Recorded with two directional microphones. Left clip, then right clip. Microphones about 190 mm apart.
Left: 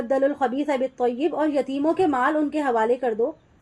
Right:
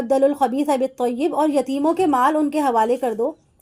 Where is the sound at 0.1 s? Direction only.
30° right (ahead or behind).